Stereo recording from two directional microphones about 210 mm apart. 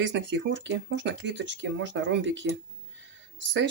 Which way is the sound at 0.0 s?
60° right (ahead or behind).